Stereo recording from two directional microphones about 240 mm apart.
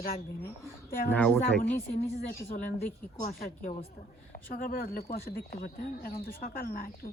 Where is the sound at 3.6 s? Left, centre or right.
Left.